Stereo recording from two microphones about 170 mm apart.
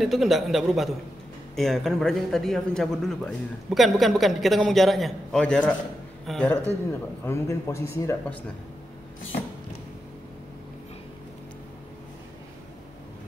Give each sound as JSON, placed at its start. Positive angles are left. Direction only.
{"t": 0.0, "sound": "a man's voice", "side_deg": 0}
{"t": 6.9, "sound": "speech", "side_deg": 15}